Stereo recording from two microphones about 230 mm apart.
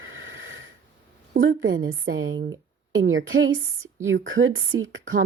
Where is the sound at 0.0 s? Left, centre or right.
Right.